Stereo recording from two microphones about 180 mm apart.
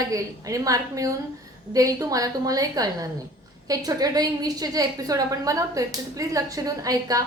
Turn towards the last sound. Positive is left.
turn(degrees=-20)  # may be behind; listen again after turning